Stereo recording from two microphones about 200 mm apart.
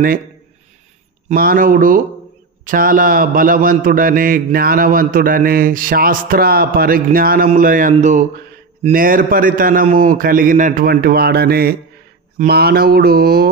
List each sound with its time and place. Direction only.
1.3 s a man's voice: 45° right (ahead or behind)
7.4 s a sound: 45° right (ahead or behind)
8.8 s a man's voice: 45° right (ahead or behind)